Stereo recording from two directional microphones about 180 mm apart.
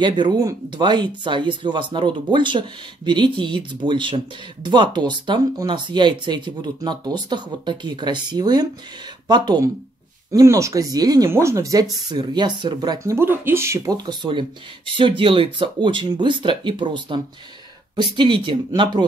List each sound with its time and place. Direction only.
0.0 s speech: 25° right (ahead or behind)